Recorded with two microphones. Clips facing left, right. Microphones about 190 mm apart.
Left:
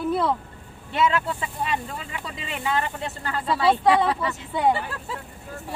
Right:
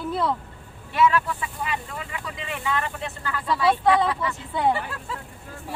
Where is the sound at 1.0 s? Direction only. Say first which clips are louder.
Right 2 dB; 25° left (ahead or behind).